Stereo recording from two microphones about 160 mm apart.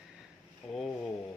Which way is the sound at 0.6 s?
35° left (ahead or behind).